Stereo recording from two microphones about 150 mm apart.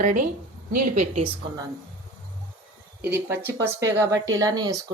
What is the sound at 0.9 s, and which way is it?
Speech, 55° right (ahead or behind).